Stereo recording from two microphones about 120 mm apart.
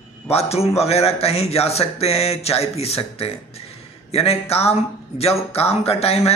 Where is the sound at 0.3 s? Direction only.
60° left (ahead or behind).